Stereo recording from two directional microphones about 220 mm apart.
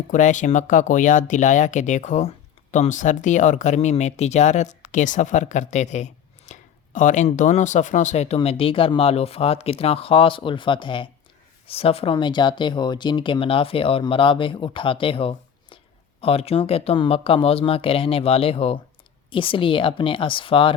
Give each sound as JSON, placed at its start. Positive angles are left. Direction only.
{"t": 0.1, "sound": "speech", "side_deg": 35}